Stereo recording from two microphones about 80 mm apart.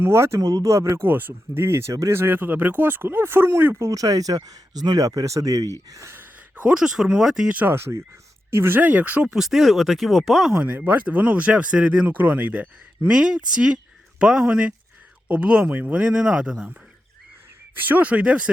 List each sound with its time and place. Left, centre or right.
0.0 s speech: right
0.3 s speech: right
0.9 s speech: right
3.8 s speech: right
6.1 s speech: centre
7.5 s speech: right
9.3 s speech: centre
10.6 s speech: centre
13.1 s speech: centre
17.7 s speech: right